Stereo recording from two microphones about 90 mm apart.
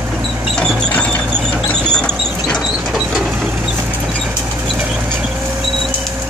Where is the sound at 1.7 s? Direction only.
10° left (ahead or behind).